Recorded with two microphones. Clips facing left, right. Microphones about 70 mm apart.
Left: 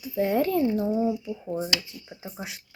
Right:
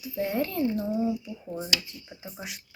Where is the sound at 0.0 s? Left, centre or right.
Left.